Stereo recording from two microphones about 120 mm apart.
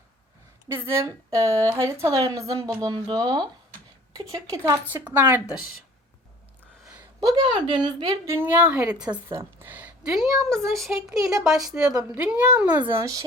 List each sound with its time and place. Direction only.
0.9 s a woman's voice: 25° right (ahead or behind)
4.9 s a woman's voice: 15° right (ahead or behind)
7.2 s a woman's voice: 35° right (ahead or behind)
8.4 s a woman's voice: 15° right (ahead or behind)
12.9 s a woman's voice: 25° right (ahead or behind)